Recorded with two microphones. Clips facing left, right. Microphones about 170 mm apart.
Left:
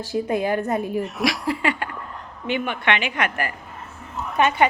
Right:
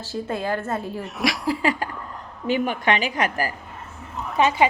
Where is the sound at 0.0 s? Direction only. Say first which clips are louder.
Left 4 dB; 15° left (ahead or behind).